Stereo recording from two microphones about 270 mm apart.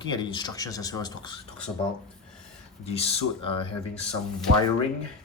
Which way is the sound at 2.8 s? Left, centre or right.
Left.